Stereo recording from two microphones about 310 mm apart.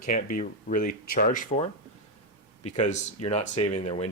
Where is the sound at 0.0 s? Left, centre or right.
Left.